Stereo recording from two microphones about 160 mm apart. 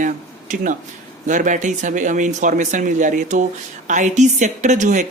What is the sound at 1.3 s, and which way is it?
Speech, 50° right (ahead or behind).